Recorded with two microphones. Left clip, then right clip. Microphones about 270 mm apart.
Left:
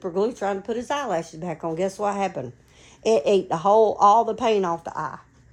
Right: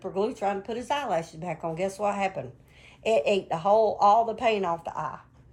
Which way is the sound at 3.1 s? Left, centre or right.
Left.